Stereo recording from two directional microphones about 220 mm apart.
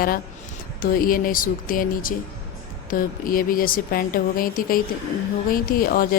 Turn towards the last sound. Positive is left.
turn(degrees=40)  # may be behind; listen again after turning